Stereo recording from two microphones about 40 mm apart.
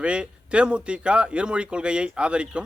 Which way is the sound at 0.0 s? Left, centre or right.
Right.